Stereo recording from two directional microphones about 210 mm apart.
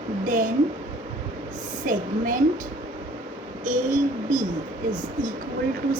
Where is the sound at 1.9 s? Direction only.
40° right (ahead or behind).